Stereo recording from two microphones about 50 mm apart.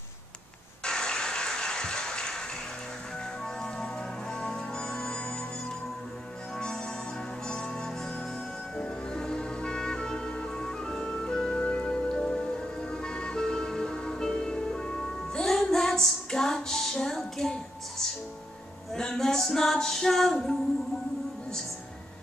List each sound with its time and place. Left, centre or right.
0.8 s a sound: centre
3.4 s music: centre
7.4 s music: centre
15.4 s female singing: centre